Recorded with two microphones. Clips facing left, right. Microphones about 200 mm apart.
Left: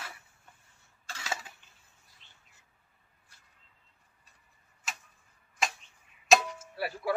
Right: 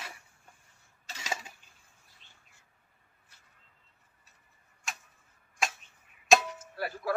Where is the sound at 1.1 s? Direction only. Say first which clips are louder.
Even; 10° right (ahead or behind).